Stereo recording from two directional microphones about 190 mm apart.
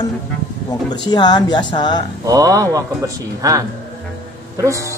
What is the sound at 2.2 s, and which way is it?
A woman's voice, 20° right (ahead or behind).